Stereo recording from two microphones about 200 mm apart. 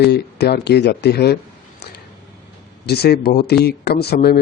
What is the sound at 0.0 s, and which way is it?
Speech, 55° left (ahead or behind).